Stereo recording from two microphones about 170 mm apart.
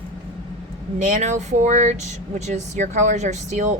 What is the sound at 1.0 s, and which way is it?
A woman's voice, 45° right (ahead or behind).